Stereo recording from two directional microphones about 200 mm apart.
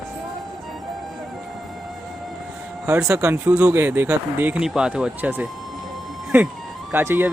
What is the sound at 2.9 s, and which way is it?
Speech, 10° right (ahead or behind).